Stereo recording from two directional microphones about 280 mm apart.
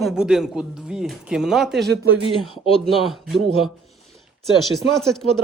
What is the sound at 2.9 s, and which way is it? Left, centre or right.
Speech, centre.